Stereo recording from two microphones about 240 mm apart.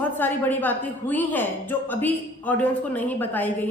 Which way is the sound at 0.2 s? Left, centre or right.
Centre.